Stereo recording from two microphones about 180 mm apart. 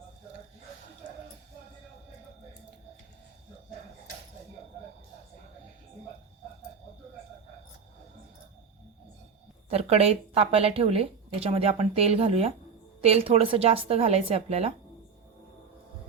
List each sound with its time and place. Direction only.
9.6 s a woman's voice: 35° right (ahead or behind)